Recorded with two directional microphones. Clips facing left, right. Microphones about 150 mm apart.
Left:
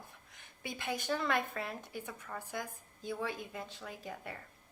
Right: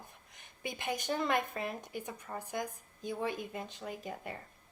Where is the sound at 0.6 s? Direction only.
20° right (ahead or behind).